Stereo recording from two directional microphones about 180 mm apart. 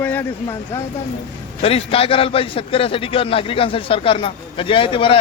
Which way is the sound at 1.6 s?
35° left (ahead or behind).